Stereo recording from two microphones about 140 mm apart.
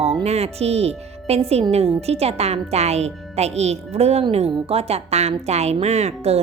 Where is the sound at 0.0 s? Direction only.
45° right (ahead or behind).